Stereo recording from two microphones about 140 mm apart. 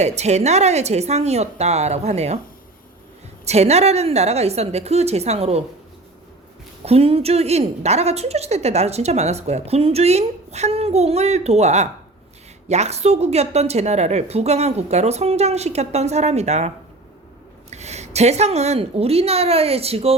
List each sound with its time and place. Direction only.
0.0 s a woman's voice: 50° right (ahead or behind)
3.4 s a woman's voice: 50° right (ahead or behind)
6.8 s a woman's voice: 45° right (ahead or behind)